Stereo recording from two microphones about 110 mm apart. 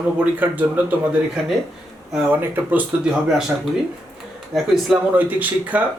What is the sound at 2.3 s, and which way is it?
Speech, 15° right (ahead or behind).